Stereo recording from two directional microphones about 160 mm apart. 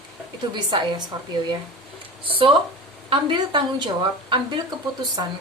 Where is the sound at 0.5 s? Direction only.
30° right (ahead or behind).